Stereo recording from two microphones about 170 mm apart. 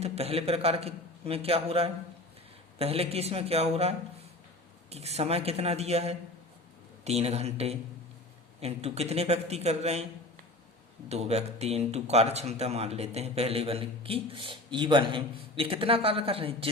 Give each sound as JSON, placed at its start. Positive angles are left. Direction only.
{"t": 0.0, "sound": "speech", "side_deg": -35}
{"t": 11.1, "sound": "speech", "side_deg": -40}